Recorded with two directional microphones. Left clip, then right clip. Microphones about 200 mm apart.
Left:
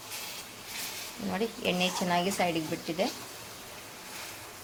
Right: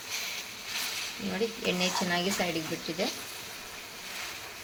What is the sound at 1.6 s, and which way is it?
Speech, centre (ahead or behind).